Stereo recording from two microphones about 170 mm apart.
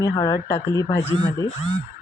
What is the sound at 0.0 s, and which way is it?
Speech, 20° left (ahead or behind).